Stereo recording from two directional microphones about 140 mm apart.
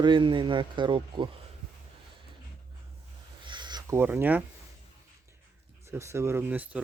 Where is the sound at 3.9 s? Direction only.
15° right (ahead or behind).